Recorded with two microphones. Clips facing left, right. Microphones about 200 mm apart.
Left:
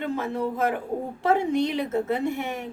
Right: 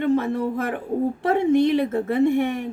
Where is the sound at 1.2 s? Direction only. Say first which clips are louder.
Right 4 dB; 55° right (ahead or behind).